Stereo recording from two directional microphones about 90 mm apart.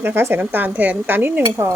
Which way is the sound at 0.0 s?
25° right (ahead or behind).